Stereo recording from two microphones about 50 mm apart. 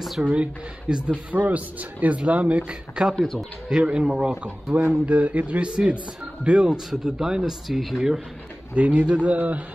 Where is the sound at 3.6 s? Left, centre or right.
Centre.